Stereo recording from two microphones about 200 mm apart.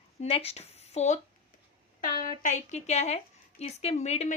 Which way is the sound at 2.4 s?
35° left (ahead or behind).